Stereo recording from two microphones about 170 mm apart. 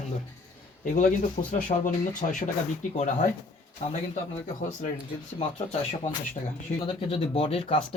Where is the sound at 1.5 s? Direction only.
50° left (ahead or behind).